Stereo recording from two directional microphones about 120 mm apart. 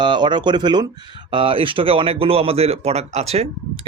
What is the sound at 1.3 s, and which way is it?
Speech, 45° right (ahead or behind).